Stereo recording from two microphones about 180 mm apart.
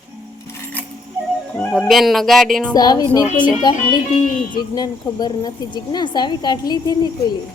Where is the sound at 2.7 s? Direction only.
20° left (ahead or behind).